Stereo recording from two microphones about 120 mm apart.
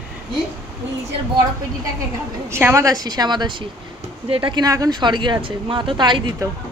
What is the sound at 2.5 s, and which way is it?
Speech, 20° right (ahead or behind).